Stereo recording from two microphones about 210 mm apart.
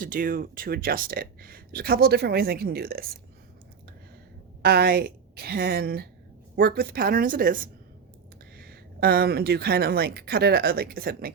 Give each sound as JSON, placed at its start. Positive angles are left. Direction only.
{"t": 0.0, "sound": "speech", "side_deg": -40}
{"t": 4.6, "sound": "speech", "side_deg": -45}